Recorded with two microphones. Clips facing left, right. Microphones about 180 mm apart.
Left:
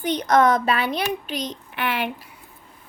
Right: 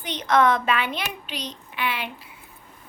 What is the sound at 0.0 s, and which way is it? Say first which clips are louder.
A child's voice: left 3 dB; 45° left (ahead or behind).